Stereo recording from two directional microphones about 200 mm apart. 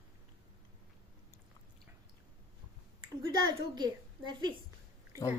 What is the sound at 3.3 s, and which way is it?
A woman's voice, 20° right (ahead or behind).